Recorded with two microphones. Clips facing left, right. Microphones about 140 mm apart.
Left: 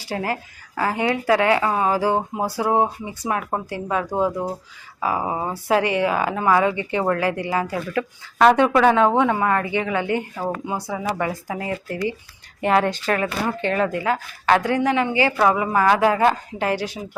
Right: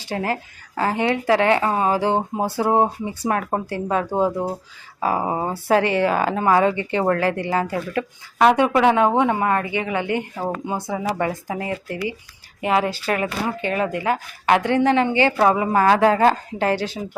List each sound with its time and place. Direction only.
0.0 s a woman's voice: 25° right (ahead or behind)
3.2 s a woman's voice: 45° right (ahead or behind); by 4.5 s 30° right (ahead or behind)
4.9 s a woman's voice: 40° right (ahead or behind)
8.4 s a woman's voice: 15° right (ahead or behind)
12.6 s a woman's voice: 5° right (ahead or behind); by 17.0 s 30° right (ahead or behind)